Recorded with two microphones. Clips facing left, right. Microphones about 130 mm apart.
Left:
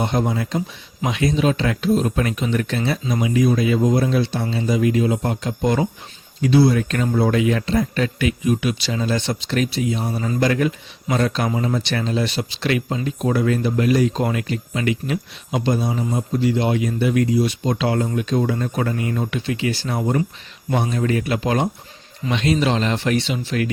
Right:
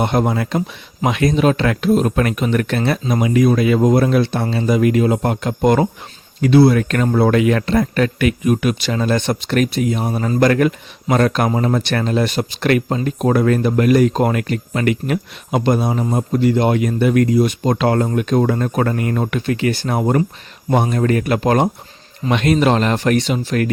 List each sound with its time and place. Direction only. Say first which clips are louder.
0.0 s speech: right 4 dB; 60° right (ahead or behind)